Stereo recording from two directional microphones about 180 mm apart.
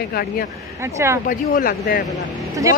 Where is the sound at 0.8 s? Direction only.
15° right (ahead or behind).